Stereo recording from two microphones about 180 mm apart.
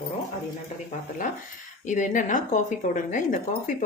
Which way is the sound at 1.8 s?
45° left (ahead or behind).